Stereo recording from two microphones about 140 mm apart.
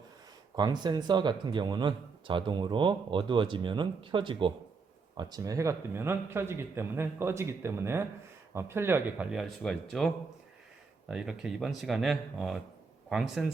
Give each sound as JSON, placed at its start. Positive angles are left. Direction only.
{"t": 0.5, "sound": "a man's voice", "side_deg": -30}
{"t": 11.1, "sound": "speech", "side_deg": -5}